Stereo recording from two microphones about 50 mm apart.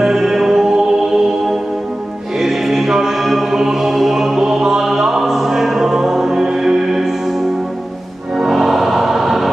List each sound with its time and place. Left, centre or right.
0.0 s music: centre
8.4 s music: centre